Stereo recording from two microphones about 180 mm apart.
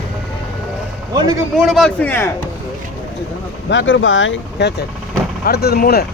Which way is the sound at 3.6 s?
90° left.